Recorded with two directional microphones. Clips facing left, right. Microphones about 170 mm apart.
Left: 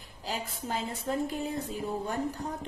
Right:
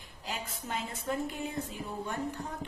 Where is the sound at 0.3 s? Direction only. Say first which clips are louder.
Left 4 dB; 35° left (ahead or behind).